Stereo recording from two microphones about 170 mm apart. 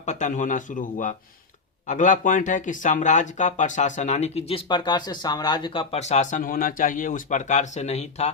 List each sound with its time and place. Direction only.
0.0 s speech: 45° left (ahead or behind)